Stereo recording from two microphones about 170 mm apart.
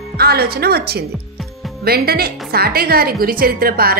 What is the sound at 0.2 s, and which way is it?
A woman's voice, 65° right (ahead or behind).